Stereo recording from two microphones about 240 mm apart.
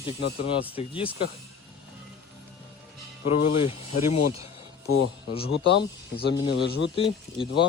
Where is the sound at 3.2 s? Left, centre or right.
Left.